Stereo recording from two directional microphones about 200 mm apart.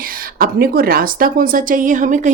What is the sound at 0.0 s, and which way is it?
A woman's voice, 45° right (ahead or behind).